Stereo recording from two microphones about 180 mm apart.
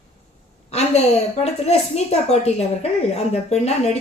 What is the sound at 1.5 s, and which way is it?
A woman's voice, 35° left (ahead or behind).